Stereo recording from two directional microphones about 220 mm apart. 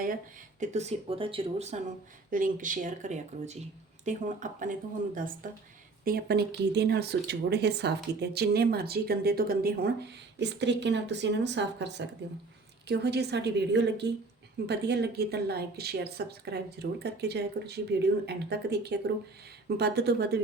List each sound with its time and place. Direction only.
0.6 s speech: 30° right (ahead or behind)
2.3 s speech: 35° right (ahead or behind)